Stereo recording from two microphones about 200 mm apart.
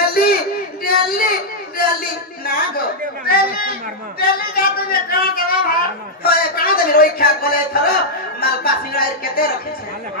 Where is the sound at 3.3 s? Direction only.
50° left (ahead or behind).